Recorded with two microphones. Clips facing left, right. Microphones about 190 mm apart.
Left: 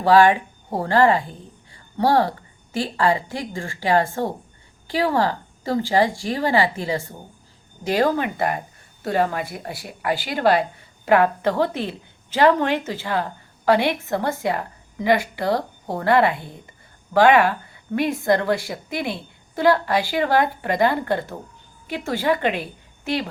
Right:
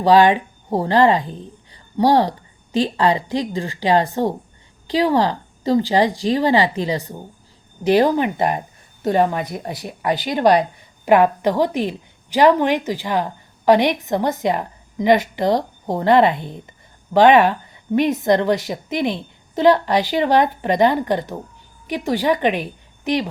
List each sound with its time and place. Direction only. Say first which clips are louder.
0.0 s a woman's voice: right 2 dB; 20° right (ahead or behind)